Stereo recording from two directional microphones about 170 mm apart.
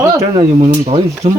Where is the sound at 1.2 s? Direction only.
45° right (ahead or behind).